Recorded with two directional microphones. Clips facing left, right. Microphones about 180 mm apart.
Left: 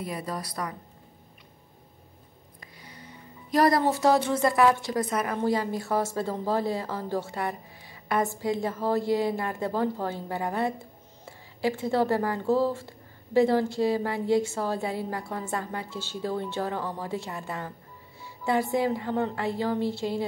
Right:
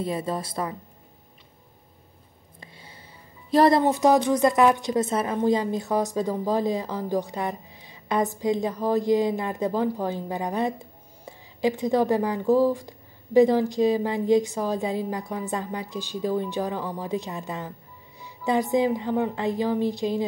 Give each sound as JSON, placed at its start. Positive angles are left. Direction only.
{"t": 0.0, "sound": "a woman's voice", "side_deg": -25}
{"t": 2.6, "sound": "speech", "side_deg": -25}